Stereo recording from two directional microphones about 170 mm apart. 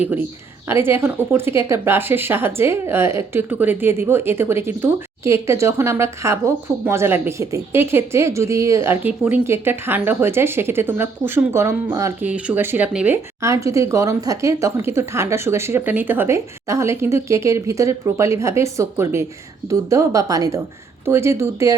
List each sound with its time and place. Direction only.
0.7 s a woman's voice: 15° right (ahead or behind)
13.4 s a woman's voice: 20° right (ahead or behind)